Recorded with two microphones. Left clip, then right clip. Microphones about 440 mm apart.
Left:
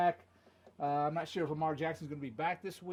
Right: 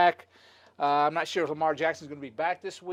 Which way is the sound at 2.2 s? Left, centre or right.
Right.